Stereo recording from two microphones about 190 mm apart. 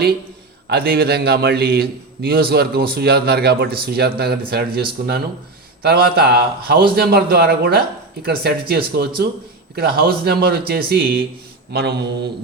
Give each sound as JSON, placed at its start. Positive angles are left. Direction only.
{"t": 0.7, "sound": "a man's voice", "side_deg": -55}